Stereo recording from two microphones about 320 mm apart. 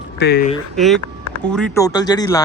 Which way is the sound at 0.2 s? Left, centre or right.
Left.